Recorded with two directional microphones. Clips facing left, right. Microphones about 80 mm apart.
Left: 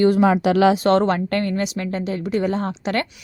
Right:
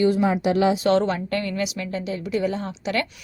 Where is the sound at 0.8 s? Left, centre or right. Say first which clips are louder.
Left 3 dB; left.